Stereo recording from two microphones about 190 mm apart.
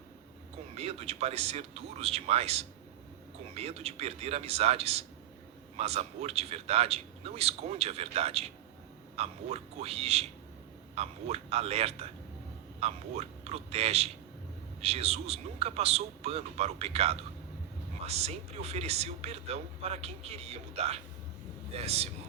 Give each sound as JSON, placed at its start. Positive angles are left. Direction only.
{"t": 0.7, "sound": "speech", "side_deg": -35}